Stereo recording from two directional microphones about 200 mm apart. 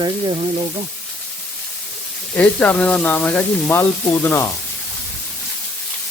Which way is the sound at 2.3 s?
5° left (ahead or behind).